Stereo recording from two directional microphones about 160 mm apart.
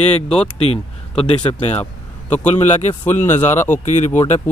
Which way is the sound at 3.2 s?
15° left (ahead or behind).